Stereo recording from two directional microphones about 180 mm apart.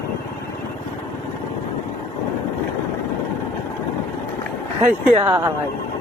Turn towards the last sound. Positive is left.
turn(degrees=-10)  # may be behind; listen again after turning